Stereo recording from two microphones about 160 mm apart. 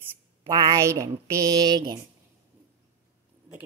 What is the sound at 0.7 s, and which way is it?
Speech, 20° right (ahead or behind).